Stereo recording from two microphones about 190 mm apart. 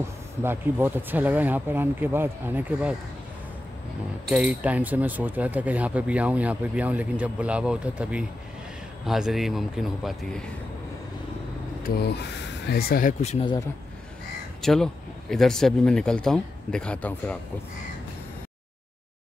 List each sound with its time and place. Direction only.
0.4 s speech: 10° right (ahead or behind)
4.3 s speech: 5° right (ahead or behind)
11.8 s speech: 60° left (ahead or behind)
13.2 s speech: 35° left (ahead or behind)
14.6 s speech: centre (ahead or behind)